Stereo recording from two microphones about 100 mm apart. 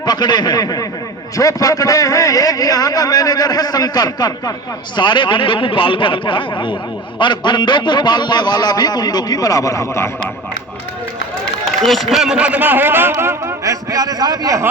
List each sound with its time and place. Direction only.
0.0 s a man's voice: 45° left (ahead or behind)
4.9 s a man's voice: 50° left (ahead or behind); by 10.1 s 30° left (ahead or behind)
11.9 s a man's voice: centre (ahead or behind); by 14.6 s 40° right (ahead or behind)